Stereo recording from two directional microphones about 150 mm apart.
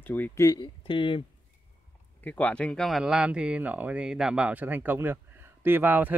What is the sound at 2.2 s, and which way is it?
Speech, 10° left (ahead or behind).